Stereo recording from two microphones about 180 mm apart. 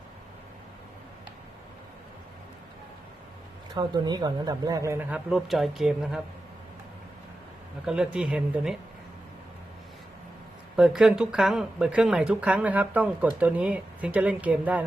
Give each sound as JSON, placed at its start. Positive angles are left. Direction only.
{"t": 3.8, "sound": "speech", "side_deg": -25}
{"t": 7.9, "sound": "speech", "side_deg": -5}
{"t": 10.8, "sound": "speech", "side_deg": -5}